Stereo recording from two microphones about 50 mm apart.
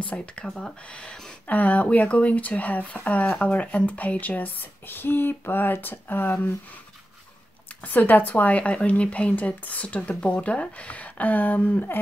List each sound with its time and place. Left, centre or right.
0.0 s a woman's voice: left
0.5 s speech: centre
1.5 s speech: left
7.8 s a woman's voice: left